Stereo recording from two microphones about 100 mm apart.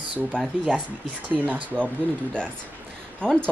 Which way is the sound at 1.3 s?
15° right (ahead or behind).